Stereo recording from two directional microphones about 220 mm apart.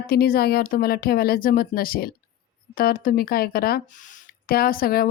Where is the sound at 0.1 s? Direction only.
45° left (ahead or behind).